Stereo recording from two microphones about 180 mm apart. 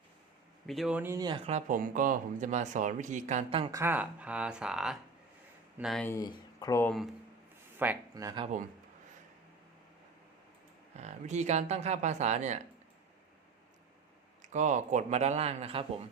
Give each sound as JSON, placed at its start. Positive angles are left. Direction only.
{"t": 0.7, "sound": "speech", "side_deg": -5}
{"t": 1.5, "sound": "speech", "side_deg": -45}
{"t": 3.7, "sound": "speech", "side_deg": -15}
{"t": 6.1, "sound": "speech", "side_deg": 20}
{"t": 8.1, "sound": "speech", "side_deg": -20}
{"t": 10.9, "sound": "speech", "side_deg": -40}
{"t": 14.4, "sound": "speech", "side_deg": -40}